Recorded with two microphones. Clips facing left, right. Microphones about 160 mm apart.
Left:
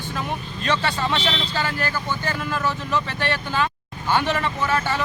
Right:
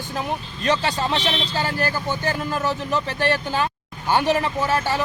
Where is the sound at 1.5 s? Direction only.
40° right (ahead or behind).